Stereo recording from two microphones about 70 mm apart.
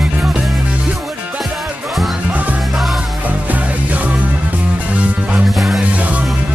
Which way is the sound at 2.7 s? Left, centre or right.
Centre.